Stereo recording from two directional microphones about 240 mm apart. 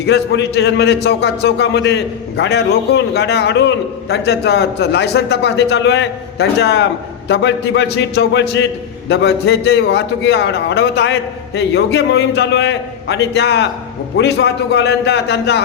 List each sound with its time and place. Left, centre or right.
0.0 s a man's voice: left